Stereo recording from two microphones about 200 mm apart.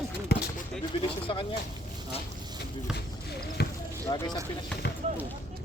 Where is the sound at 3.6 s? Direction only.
50° left (ahead or behind).